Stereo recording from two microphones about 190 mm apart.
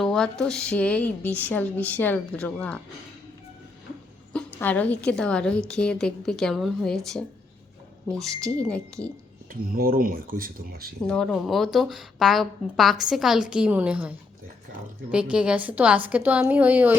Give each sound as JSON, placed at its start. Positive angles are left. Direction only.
{"t": 0.0, "sound": "speech", "side_deg": 5}
{"t": 4.3, "sound": "a woman's voice", "side_deg": 5}
{"t": 9.5, "sound": "speech", "side_deg": -50}
{"t": 11.0, "sound": "a woman's voice", "side_deg": 5}
{"t": 15.1, "sound": "a woman's voice", "side_deg": -5}